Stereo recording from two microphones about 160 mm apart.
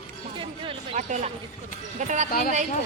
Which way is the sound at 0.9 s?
50° right (ahead or behind).